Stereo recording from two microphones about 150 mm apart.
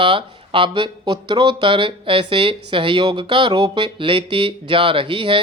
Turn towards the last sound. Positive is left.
turn(degrees=-35)  # may be behind; listen again after turning